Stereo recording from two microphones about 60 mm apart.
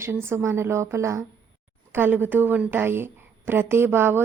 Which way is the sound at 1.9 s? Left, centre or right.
Right.